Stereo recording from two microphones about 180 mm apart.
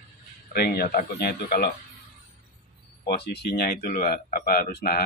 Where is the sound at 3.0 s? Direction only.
65° left (ahead or behind).